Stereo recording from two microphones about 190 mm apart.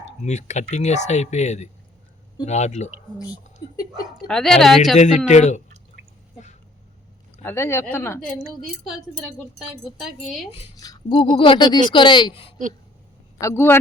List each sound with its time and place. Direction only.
0.2 s speech: 35° left (ahead or behind)
4.3 s speech: centre (ahead or behind)
4.9 s speech: 35° left (ahead or behind)
7.4 s speech: 15° left (ahead or behind)
8.6 s speech: centre (ahead or behind)
10.5 s speech: 25° left (ahead or behind)
13.4 s speech: 10° left (ahead or behind)